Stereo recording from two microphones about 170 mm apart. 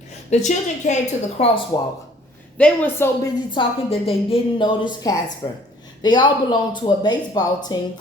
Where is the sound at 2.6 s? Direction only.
10° left (ahead or behind).